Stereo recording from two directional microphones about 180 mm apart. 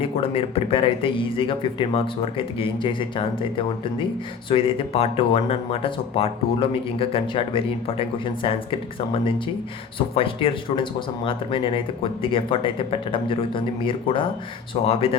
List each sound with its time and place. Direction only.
0.0 s speech: 30° left (ahead or behind)
4.4 s speech: 30° left (ahead or behind)